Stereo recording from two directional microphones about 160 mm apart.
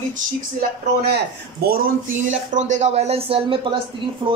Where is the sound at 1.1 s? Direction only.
70° right (ahead or behind); by 3.7 s 35° right (ahead or behind).